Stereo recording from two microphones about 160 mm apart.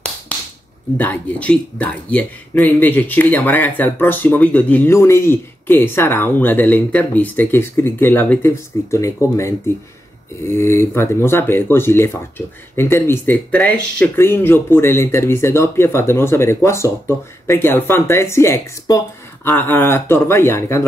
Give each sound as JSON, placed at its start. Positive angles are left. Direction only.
{"t": 0.9, "sound": "speech", "side_deg": 10}